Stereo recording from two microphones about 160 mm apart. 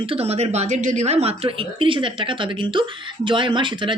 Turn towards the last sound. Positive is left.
turn(degrees=-30)  # may be behind; listen again after turning